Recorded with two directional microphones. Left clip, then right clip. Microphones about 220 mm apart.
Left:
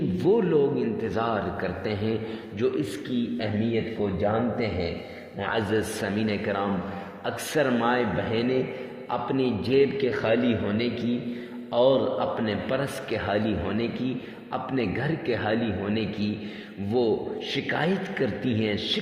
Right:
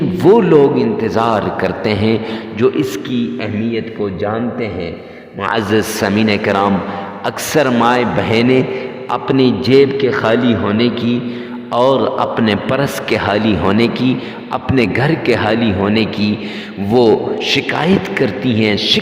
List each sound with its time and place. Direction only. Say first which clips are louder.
0.2 s a man's voice: right 13 dB; 45° right (ahead or behind)
5.4 s a man's voice: right 11 dB; 45° right (ahead or behind)